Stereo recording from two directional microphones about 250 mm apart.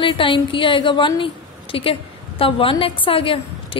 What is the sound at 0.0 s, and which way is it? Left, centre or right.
A woman's voice, centre.